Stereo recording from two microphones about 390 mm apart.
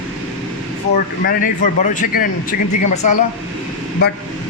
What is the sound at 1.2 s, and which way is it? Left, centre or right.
Speech, left.